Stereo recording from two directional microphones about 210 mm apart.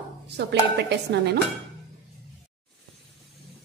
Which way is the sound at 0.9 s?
55° right (ahead or behind).